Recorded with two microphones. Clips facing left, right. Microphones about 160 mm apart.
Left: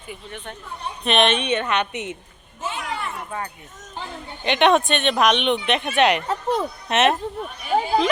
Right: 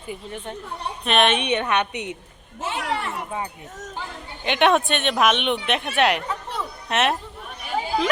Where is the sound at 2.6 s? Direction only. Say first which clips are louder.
Right 2 dB; 70° right (ahead or behind).